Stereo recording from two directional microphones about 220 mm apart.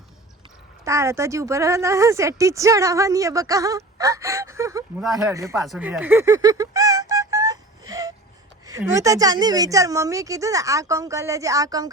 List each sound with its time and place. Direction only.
0.9 s speech: 15° right (ahead or behind)
5.6 s music: centre (ahead or behind)
8.8 s speech: 15° right (ahead or behind)